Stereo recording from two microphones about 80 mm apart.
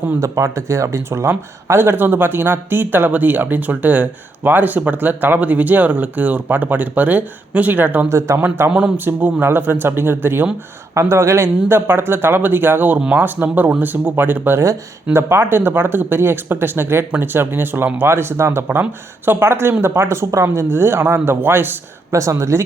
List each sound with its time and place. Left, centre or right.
0.1 s speech: right
14.6 s speech: right
22.1 s speech: right